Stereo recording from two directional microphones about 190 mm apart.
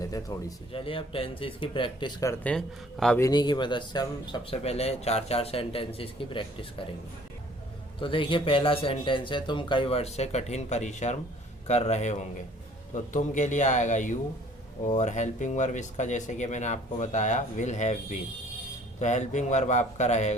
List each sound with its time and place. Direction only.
0.0 s speech: 20° left (ahead or behind)
0.7 s speech: 30° left (ahead or behind)
2.4 s a man's voice: 5° left (ahead or behind)
3.2 s speech: 20° left (ahead or behind)
7.9 s speech: 25° left (ahead or behind)
18.9 s speech: 40° left (ahead or behind)